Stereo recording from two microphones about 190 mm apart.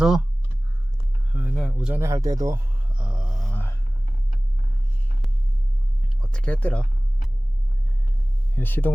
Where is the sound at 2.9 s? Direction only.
5° right (ahead or behind).